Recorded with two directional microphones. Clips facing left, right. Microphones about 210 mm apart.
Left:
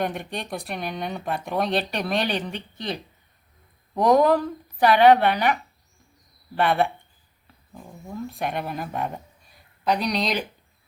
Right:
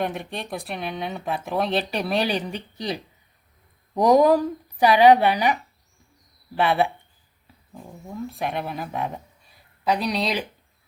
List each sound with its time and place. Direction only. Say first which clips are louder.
0.0 s speech: even; centre (ahead or behind)
2.5 s speech: right 1 dB; 35° right (ahead or behind)
3.9 s speech: right 2 dB; 15° right (ahead or behind)
6.6 s speech: even; 5° right (ahead or behind)